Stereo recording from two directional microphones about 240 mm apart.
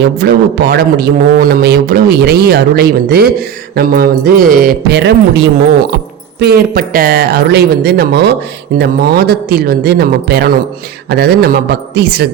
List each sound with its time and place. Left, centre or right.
0.2 s a man's voice: right